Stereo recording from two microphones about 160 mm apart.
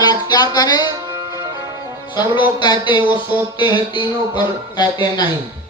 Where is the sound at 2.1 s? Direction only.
25° left (ahead or behind).